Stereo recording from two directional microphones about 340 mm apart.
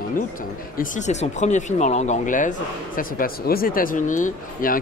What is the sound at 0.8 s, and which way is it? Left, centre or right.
Speech, left.